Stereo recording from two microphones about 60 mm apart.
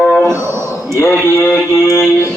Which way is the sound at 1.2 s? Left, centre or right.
Left.